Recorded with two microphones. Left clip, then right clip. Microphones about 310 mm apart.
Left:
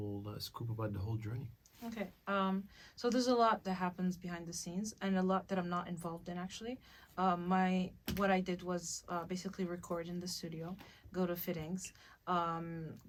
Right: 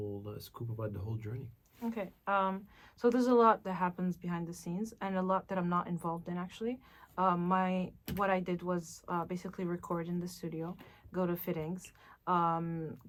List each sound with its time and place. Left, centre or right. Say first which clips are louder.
0.2 s speech: even; centre
1.9 s speech: right 5 dB; centre